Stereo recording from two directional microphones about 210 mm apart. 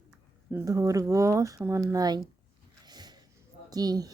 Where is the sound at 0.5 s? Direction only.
15° right (ahead or behind).